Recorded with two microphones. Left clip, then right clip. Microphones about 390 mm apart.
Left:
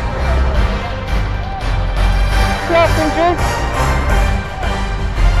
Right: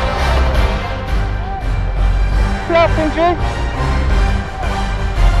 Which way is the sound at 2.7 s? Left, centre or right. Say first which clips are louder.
Even; centre.